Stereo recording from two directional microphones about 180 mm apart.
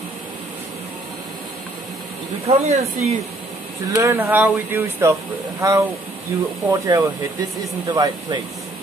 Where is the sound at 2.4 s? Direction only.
35° right (ahead or behind).